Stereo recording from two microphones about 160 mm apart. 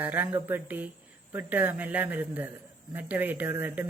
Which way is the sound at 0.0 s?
10° right (ahead or behind).